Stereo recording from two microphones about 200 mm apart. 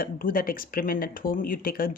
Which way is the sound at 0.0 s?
45° left (ahead or behind).